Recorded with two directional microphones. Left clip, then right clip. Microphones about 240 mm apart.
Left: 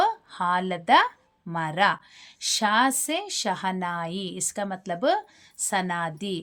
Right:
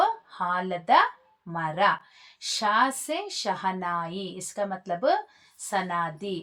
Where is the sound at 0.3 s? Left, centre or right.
Left.